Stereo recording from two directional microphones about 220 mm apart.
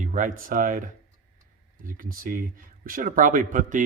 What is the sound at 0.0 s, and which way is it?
Speech, 35° right (ahead or behind).